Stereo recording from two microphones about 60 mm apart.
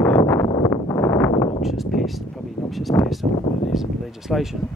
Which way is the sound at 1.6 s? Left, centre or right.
Centre.